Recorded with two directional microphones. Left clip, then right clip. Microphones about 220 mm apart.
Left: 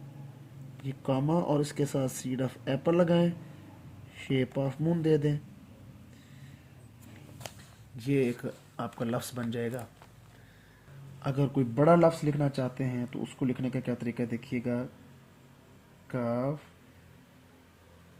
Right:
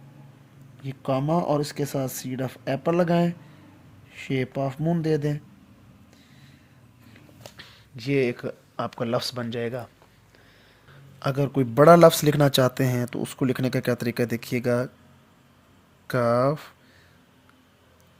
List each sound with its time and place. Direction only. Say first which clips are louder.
0.9 s speech: right 5 dB; 30° right (ahead or behind)
7.9 s speech: right 5 dB; 25° right (ahead or behind)
11.2 s speech: right 6 dB; 35° right (ahead or behind)
16.0 s speech: right 11 dB; 45° right (ahead or behind)